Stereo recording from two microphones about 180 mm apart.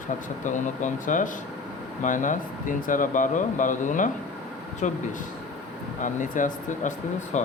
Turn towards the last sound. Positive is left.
turn(degrees=45)  # may be behind; listen again after turning